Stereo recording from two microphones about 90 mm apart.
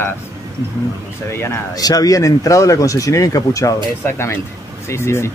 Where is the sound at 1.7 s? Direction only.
45° left (ahead or behind).